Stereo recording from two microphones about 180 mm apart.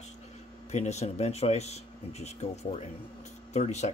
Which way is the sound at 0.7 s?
40° left (ahead or behind).